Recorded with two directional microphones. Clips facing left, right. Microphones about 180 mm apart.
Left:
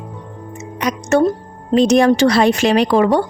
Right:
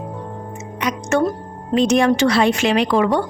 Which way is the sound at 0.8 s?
40° left (ahead or behind).